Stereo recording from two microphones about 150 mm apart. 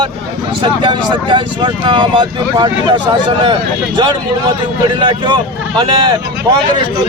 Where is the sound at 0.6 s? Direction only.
35° right (ahead or behind).